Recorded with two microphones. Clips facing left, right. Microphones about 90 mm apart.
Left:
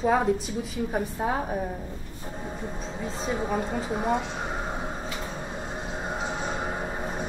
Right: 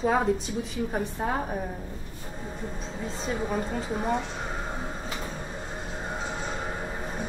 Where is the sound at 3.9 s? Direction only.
15° left (ahead or behind).